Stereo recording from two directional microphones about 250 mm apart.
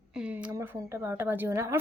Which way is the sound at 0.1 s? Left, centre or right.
Centre.